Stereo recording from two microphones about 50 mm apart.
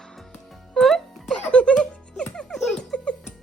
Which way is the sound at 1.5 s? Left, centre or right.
Left.